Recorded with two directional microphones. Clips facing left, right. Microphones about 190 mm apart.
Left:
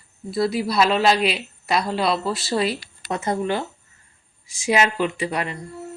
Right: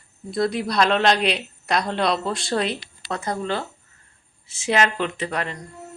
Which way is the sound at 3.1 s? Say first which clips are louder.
Left 3 dB; 20° left (ahead or behind).